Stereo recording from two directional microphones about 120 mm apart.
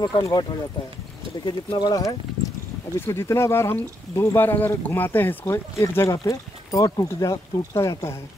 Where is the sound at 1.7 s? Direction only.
30° left (ahead or behind).